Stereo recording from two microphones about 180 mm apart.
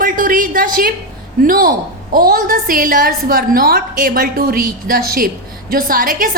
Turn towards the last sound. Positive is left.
turn(degrees=-50)  # may be behind; listen again after turning